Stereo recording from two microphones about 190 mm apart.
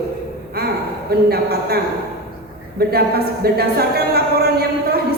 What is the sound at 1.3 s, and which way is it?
Speech, 55° right (ahead or behind).